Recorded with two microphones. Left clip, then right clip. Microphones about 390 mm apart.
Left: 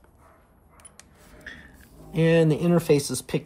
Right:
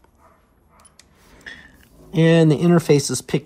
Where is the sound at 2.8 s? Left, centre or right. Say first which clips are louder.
Right 4 dB; right.